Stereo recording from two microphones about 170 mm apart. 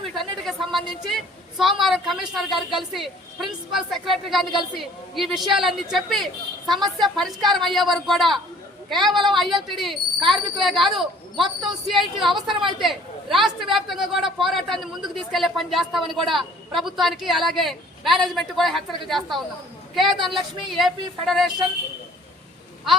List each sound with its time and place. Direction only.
0.0 s a woman's voice: centre (ahead or behind)
20.1 s a woman's voice: 30° right (ahead or behind)
20.3 s a woman's voice: centre (ahead or behind)